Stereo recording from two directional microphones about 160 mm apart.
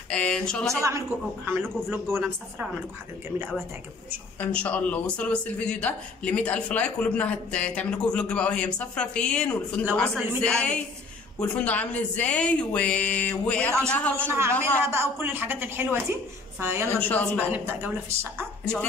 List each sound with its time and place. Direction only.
0.1 s speech: 5° left (ahead or behind)
0.8 s a woman's voice: 15° right (ahead or behind)
4.4 s speech: 5° left (ahead or behind)
14.2 s a woman's voice: 15° right (ahead or behind)
17.0 s speech: 10° left (ahead or behind)
17.4 s a woman's voice: 10° right (ahead or behind)